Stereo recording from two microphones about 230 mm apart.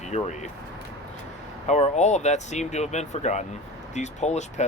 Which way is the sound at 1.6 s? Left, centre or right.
Left.